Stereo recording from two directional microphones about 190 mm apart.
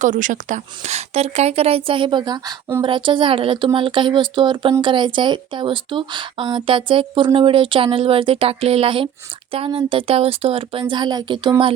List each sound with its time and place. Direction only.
0.0 s a woman's voice: 40° right (ahead or behind); by 11.7 s 25° right (ahead or behind)